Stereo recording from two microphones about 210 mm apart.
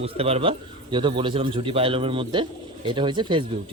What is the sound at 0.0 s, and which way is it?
Speech, 30° right (ahead or behind).